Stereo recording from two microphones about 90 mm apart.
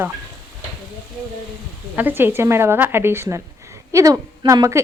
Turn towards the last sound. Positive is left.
turn(degrees=-35)  # may be behind; listen again after turning